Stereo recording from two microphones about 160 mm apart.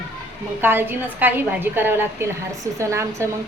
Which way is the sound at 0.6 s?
15° right (ahead or behind).